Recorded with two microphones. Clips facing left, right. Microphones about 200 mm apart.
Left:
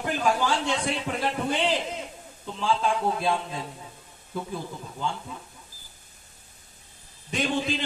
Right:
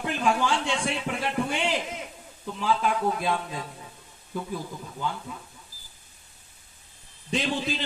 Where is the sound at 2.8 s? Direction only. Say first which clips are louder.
Even; 30° left (ahead or behind).